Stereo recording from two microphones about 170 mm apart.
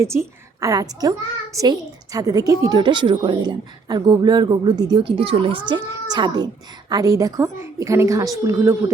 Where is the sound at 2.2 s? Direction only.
20° right (ahead or behind).